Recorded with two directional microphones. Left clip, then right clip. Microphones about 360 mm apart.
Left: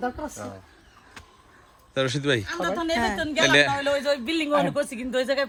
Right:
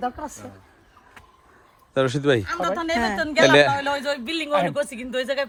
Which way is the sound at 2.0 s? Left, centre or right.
Centre.